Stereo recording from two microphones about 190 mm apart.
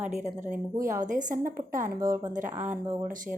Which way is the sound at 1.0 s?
40° right (ahead or behind).